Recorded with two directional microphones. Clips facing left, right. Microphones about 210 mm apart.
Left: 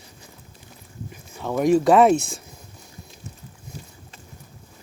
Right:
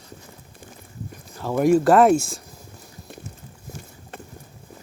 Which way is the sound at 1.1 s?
Centre (ahead or behind).